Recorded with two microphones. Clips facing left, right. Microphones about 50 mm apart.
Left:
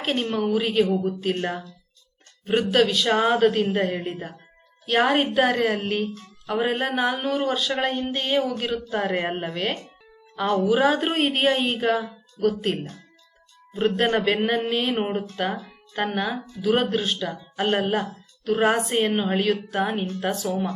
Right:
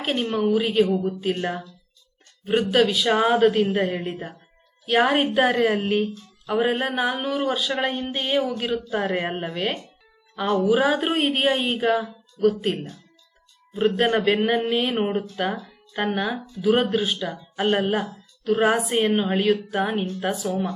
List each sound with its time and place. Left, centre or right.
0.0 s a woman's voice: centre
6.4 s a sound: centre
7.1 s a woman's voice: centre